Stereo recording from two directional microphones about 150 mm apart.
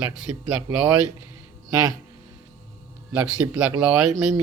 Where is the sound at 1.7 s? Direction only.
25° right (ahead or behind).